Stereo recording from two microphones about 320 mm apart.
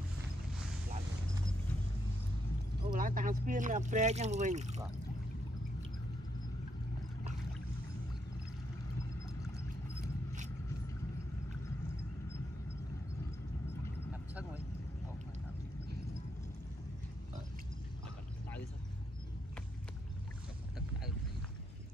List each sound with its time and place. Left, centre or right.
2.8 s speech: right